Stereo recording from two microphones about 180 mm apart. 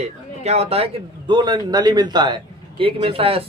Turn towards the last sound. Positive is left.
turn(degrees=-30)  # may be behind; listen again after turning